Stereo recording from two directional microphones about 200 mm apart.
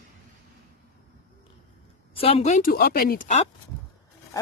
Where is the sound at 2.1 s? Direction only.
30° left (ahead or behind).